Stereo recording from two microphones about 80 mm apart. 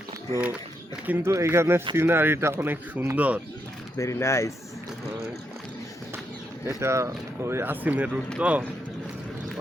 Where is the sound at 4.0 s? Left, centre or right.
Left.